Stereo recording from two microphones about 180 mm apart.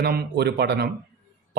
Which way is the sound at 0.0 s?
65° right (ahead or behind).